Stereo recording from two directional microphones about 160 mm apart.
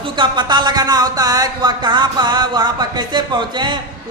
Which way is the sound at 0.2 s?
30° right (ahead or behind).